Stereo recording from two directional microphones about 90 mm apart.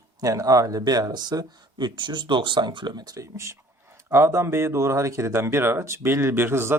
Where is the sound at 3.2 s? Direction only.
30° right (ahead or behind).